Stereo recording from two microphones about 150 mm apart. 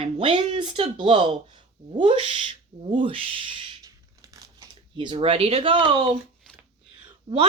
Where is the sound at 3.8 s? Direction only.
25° right (ahead or behind).